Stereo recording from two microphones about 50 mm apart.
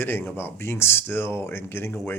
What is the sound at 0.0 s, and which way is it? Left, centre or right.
Speech, left.